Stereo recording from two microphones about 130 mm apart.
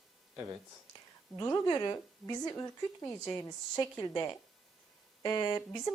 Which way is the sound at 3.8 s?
30° left (ahead or behind).